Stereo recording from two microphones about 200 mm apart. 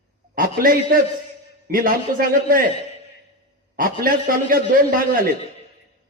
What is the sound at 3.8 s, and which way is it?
A man's voice, 45° right (ahead or behind).